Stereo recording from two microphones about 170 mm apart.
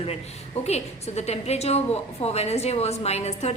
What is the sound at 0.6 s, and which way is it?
A woman's voice, 40° left (ahead or behind).